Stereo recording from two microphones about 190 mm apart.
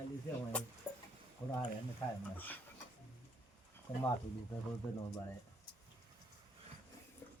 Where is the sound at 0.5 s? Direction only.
5° left (ahead or behind).